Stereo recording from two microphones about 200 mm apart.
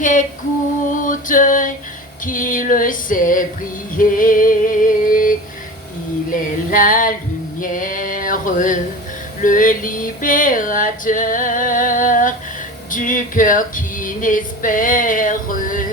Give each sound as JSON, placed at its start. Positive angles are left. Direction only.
{"t": 0.0, "sound": "a sound", "side_deg": 40}
{"t": 2.2, "sound": "female singing", "side_deg": 45}
{"t": 3.9, "sound": "music", "side_deg": 45}
{"t": 6.3, "sound": "female singing", "side_deg": 40}
{"t": 7.6, "sound": "male singing", "side_deg": 40}
{"t": 9.4, "sound": "a sound", "side_deg": 40}
{"t": 12.9, "sound": "speech", "side_deg": 40}